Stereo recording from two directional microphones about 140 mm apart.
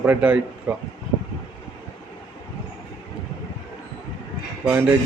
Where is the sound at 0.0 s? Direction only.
10° right (ahead or behind).